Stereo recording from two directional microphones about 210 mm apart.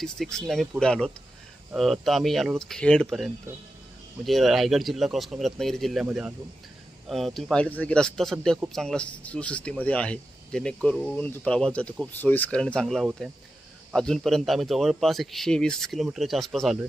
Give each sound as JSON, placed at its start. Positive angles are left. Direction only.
{"t": 0.0, "sound": "speech", "side_deg": 0}